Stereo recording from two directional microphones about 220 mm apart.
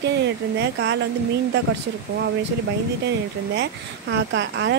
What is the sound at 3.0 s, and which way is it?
Speech, 50° right (ahead or behind).